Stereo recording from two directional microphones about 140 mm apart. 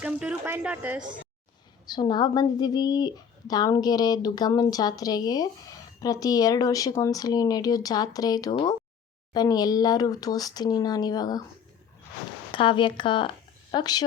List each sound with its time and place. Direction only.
0.0 s speech: 10° right (ahead or behind)
1.9 s speech: 30° left (ahead or behind)
12.5 s speech: 35° left (ahead or behind)